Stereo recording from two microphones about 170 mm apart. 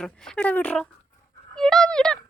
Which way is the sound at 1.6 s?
5° left (ahead or behind).